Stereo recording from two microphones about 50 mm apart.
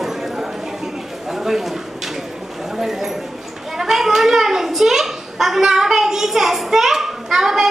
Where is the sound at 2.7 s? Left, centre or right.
Centre.